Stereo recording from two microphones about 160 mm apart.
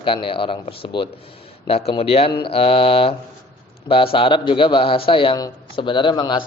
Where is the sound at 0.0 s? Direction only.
30° left (ahead or behind).